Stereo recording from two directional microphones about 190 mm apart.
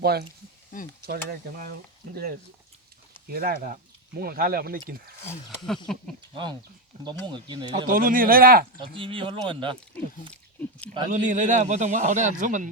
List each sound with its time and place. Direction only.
0.0 s speech: 55° right (ahead or behind)
5.6 s speech: centre (ahead or behind)
6.3 s speech: 25° right (ahead or behind)
7.9 s speech: 45° right (ahead or behind)
9.0 s speech: 25° right (ahead or behind)
11.1 s speech: 40° right (ahead or behind)